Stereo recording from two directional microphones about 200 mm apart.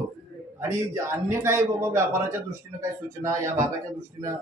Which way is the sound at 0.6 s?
15° right (ahead or behind).